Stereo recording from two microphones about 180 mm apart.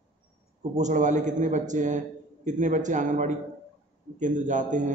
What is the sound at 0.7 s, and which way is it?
Speech, 45° right (ahead or behind).